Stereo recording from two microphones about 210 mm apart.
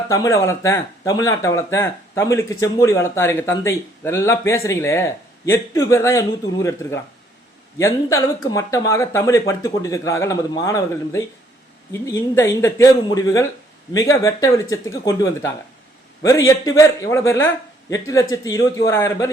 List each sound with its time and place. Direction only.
0.1 s speech: 15° left (ahead or behind)